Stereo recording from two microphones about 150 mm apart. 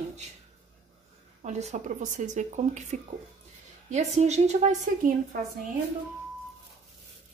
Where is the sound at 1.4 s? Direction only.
50° right (ahead or behind).